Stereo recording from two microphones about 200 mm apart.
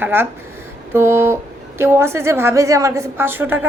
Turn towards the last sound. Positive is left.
turn(degrees=-10)  # may be behind; listen again after turning